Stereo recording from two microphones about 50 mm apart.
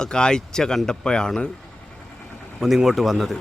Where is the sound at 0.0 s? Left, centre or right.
Centre.